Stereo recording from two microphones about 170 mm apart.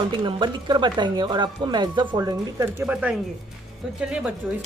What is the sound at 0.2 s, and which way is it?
Speech, 25° right (ahead or behind).